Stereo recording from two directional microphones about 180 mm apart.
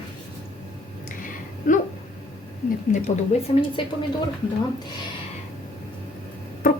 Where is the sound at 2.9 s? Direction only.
40° left (ahead or behind).